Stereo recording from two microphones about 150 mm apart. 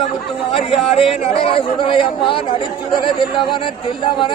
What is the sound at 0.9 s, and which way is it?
Speech, 40° left (ahead or behind).